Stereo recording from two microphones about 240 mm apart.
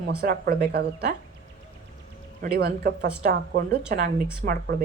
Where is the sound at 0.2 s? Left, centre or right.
Right.